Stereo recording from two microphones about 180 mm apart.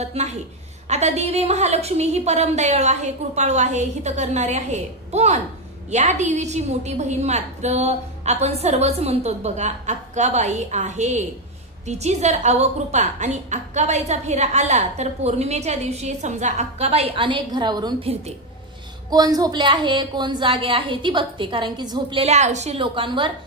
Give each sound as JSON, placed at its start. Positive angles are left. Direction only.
{"t": 0.0, "sound": "a woman's voice", "side_deg": -35}
{"t": 18.0, "sound": "a woman's voice", "side_deg": -35}
{"t": 19.0, "sound": "a woman's voice", "side_deg": -20}